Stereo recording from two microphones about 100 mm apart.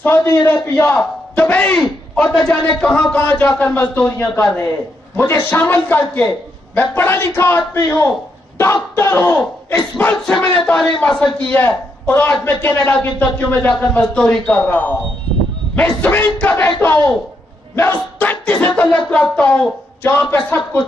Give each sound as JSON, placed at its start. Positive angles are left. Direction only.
{"t": 0.0, "sound": "a man's voice", "side_deg": 25}
{"t": 9.7, "sound": "a man's voice", "side_deg": 15}
{"t": 18.2, "sound": "a man's voice", "side_deg": 15}